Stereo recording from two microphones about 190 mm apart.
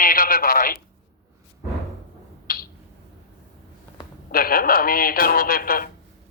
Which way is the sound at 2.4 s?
50° left (ahead or behind).